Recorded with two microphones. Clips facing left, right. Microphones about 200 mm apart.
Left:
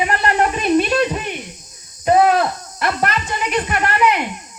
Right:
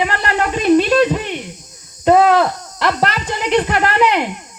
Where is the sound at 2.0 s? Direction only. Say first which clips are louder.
Right 2 dB; 70° right (ahead or behind).